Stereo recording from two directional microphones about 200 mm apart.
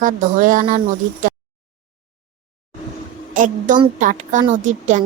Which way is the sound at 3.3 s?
40° right (ahead or behind).